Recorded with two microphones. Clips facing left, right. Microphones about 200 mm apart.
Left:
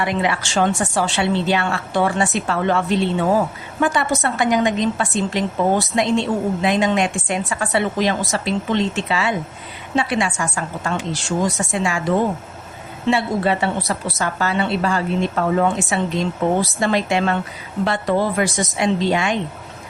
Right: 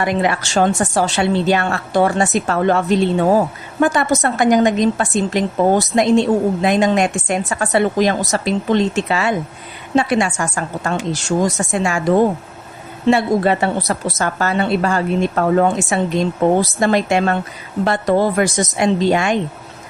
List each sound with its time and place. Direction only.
0.0 s a woman's voice: 45° right (ahead or behind)